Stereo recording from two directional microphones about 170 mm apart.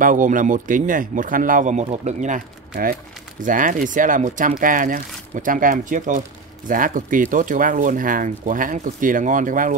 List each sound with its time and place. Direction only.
0.0 s speech: 50° right (ahead or behind)